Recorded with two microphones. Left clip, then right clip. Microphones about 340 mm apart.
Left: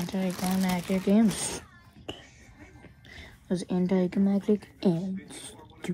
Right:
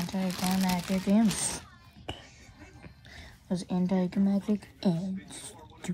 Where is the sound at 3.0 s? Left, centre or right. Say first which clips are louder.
Left 4 dB; centre.